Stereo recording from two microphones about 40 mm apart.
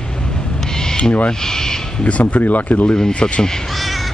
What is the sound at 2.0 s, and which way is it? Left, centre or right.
Speech, left.